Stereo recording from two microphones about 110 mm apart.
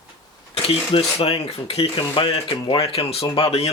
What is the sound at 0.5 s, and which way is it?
Speech, 60° left (ahead or behind).